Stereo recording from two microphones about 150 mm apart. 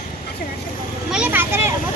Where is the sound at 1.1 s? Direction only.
10° right (ahead or behind).